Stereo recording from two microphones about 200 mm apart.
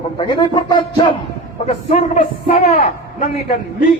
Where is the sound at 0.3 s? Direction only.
25° left (ahead or behind).